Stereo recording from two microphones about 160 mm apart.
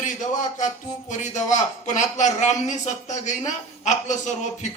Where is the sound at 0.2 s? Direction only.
50° left (ahead or behind).